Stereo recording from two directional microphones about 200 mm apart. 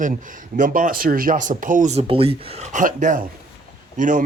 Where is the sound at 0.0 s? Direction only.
40° right (ahead or behind).